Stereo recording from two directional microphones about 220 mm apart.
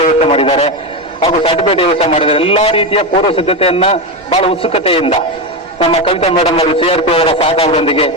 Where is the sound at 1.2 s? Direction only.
25° left (ahead or behind).